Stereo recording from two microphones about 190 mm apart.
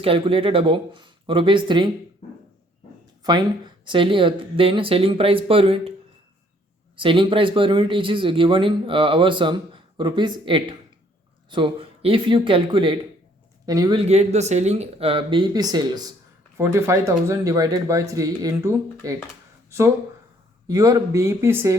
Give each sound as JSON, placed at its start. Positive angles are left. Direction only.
{"t": 0.0, "sound": "speech", "side_deg": -30}
{"t": 3.8, "sound": "speech", "side_deg": -25}
{"t": 6.9, "sound": "speech", "side_deg": -25}
{"t": 14.0, "sound": "speech", "side_deg": -35}
{"t": 20.7, "sound": "speech", "side_deg": -20}